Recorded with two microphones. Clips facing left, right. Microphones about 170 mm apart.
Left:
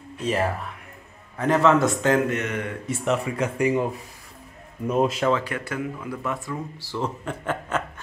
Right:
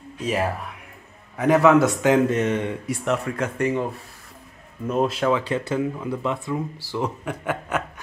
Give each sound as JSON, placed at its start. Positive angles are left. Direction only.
{"t": 0.2, "sound": "a man's voice", "side_deg": -5}
{"t": 2.2, "sound": "speech", "side_deg": -30}
{"t": 3.1, "sound": "speech", "side_deg": 5}
{"t": 4.8, "sound": "a man's voice", "side_deg": 5}
{"t": 5.5, "sound": "speech", "side_deg": -25}